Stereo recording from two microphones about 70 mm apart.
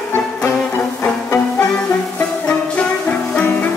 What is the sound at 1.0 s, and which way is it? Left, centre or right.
Music, centre.